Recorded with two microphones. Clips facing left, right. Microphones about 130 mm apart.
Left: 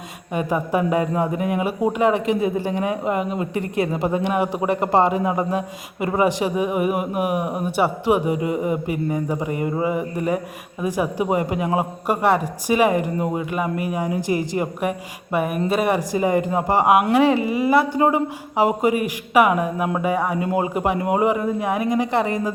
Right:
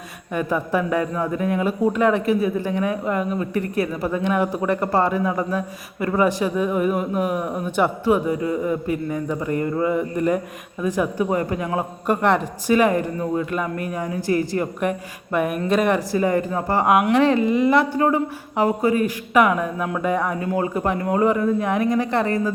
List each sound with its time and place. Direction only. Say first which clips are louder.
0.3 s a man's voice: left 1 dB; 15° left (ahead or behind)
20.4 s a man's voice: left 1 dB; 15° left (ahead or behind)